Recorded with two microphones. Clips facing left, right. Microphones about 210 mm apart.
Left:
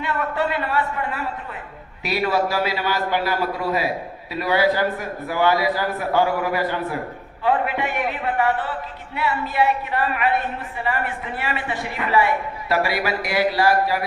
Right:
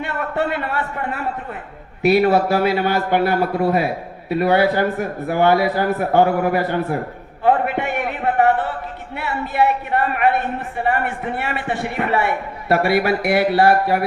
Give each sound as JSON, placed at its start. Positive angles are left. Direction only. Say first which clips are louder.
{"t": 0.0, "sound": "a man's voice", "louder": "right 1 dB", "side_deg": -55}